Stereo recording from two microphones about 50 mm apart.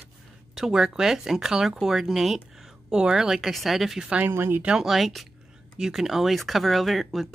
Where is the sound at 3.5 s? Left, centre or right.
Centre.